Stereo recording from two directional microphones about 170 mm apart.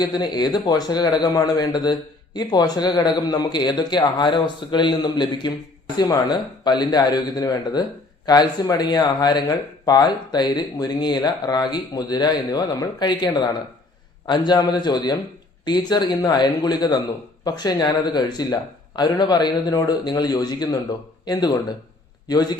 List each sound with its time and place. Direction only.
0.0 s a man's voice: 25° left (ahead or behind)